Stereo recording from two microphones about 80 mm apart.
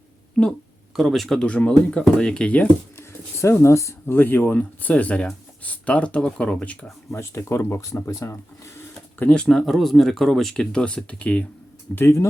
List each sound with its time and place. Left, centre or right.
0.4 s speech: centre
3.0 s a sound: left
4.1 s speech: left
7.1 s speech: left
9.1 s speech: centre
11.9 s speech: left